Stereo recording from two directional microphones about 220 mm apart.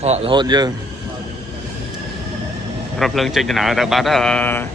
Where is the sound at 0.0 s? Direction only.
25° right (ahead or behind).